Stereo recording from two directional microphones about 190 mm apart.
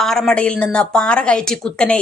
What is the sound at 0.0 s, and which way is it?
A woman's voice, centre (ahead or behind).